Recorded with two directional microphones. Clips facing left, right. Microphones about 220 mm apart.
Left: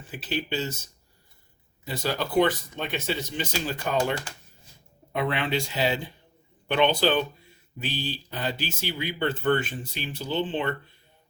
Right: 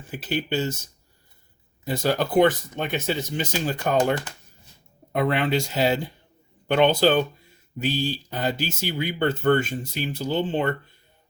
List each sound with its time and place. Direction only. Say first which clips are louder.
0.1 s speech: right 4 dB; 50° right (ahead or behind)
1.8 s speech: right 6 dB; 50° right (ahead or behind)
5.1 s speech: right 4 dB; 40° right (ahead or behind)